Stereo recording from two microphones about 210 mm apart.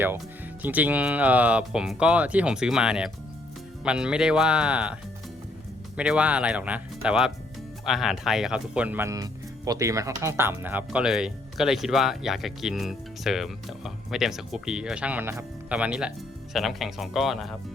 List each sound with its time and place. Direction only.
0.6 s speech: 10° right (ahead or behind)
6.0 s speech: 5° right (ahead or behind)